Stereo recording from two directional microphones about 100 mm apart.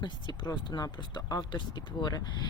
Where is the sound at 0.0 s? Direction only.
50° left (ahead or behind).